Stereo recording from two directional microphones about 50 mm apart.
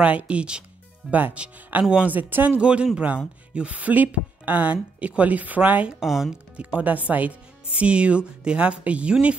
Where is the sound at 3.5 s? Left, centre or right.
Right.